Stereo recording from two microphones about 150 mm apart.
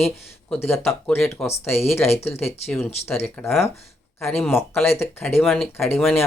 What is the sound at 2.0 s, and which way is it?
Speech, 45° left (ahead or behind).